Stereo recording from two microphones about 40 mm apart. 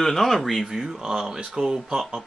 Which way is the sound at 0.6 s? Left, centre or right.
Centre.